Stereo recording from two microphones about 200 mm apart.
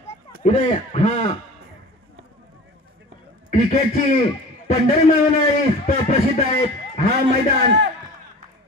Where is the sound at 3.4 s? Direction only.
40° left (ahead or behind).